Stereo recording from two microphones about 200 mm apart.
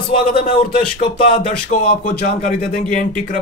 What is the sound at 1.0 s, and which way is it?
Speech, 30° left (ahead or behind).